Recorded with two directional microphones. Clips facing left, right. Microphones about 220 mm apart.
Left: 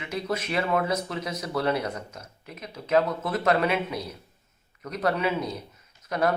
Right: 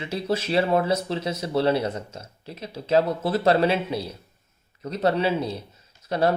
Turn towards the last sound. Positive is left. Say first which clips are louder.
# right 3 dB
turn(degrees=-30)  # may be behind; listen again after turning